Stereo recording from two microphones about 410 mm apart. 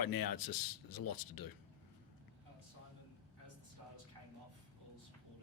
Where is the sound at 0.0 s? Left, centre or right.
Left.